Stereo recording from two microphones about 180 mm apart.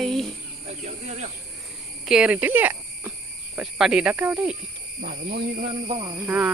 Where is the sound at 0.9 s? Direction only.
35° right (ahead or behind).